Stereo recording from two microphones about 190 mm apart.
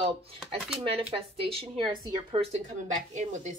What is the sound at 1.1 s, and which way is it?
Speech, 30° right (ahead or behind).